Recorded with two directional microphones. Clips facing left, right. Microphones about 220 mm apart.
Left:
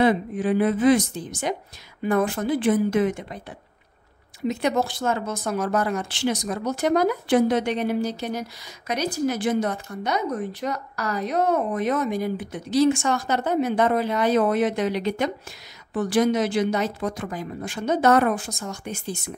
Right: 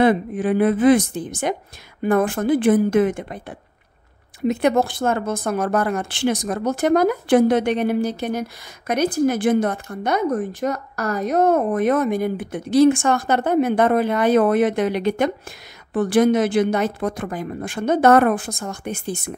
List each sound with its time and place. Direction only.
0.0 s speech: 55° right (ahead or behind)